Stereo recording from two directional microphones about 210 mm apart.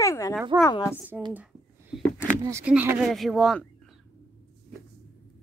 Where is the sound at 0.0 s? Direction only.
15° left (ahead or behind).